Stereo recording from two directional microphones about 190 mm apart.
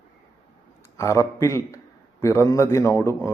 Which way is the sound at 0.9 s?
15° left (ahead or behind).